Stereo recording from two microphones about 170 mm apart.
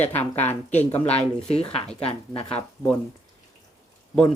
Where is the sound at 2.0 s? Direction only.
35° left (ahead or behind).